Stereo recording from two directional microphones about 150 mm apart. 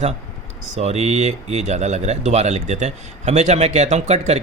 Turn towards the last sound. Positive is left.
turn(degrees=-45)  # may be behind; listen again after turning